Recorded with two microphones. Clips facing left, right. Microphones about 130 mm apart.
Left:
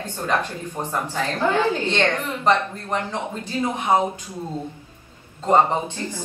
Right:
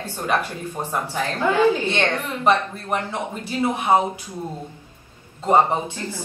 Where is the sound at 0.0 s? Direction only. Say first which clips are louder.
Even; 10° right (ahead or behind).